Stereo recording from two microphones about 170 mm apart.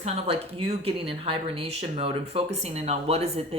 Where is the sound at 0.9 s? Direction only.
35° right (ahead or behind).